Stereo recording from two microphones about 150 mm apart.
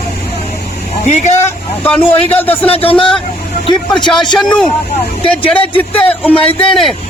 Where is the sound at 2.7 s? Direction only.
40° left (ahead or behind).